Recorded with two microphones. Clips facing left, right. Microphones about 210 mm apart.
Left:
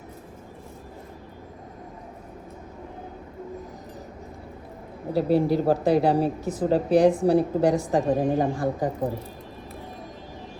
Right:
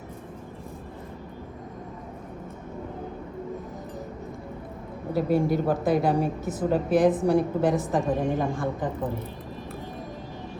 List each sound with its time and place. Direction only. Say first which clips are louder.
5.1 s a woman's voice: left 2 dB; 35° left (ahead or behind)